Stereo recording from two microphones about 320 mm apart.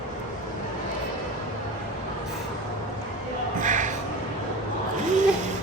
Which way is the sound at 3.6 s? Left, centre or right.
Right.